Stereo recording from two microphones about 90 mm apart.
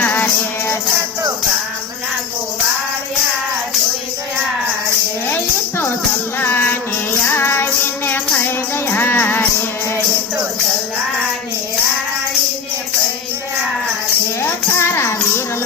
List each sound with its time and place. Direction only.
0.0 s music: 20° left (ahead or behind)
5.3 s music: 25° left (ahead or behind)
14.4 s music: 30° left (ahead or behind)